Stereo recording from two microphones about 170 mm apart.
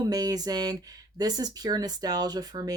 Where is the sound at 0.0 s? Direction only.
20° right (ahead or behind).